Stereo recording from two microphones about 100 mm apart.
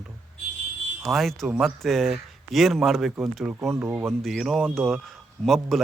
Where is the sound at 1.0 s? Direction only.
Centre (ahead or behind).